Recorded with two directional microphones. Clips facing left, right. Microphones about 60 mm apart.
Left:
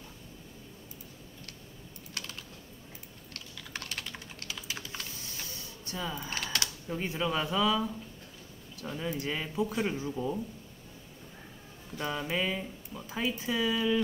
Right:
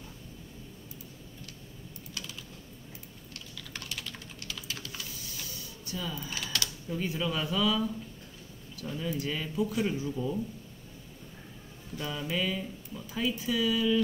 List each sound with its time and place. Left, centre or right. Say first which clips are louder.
3.5 s typing: left 1 dB; centre
4.9 s typing: left 1 dB; left
8.8 s speech: right 1 dB; left
12.0 s speech: left 1 dB; left